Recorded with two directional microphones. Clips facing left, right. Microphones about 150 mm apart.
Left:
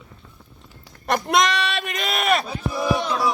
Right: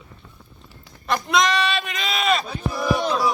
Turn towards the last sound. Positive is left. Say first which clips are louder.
# right 1 dB
turn(degrees=0)  # may be behind; listen again after turning